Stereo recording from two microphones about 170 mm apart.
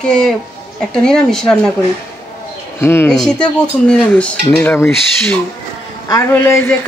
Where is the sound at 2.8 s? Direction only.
15° left (ahead or behind).